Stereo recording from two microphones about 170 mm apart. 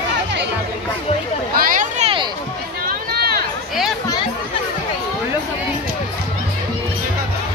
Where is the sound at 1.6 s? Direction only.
50° right (ahead or behind).